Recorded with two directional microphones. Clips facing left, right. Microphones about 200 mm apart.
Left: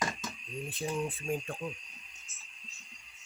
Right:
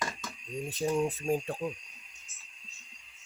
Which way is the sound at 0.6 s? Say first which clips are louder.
Right 6 dB; 40° right (ahead or behind).